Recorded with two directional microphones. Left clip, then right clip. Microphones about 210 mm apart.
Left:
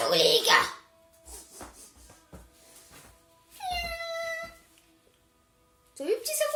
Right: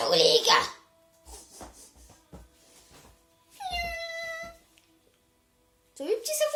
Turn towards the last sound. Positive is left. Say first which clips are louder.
# right 1 dB
turn(degrees=10)  # may be behind; listen again after turning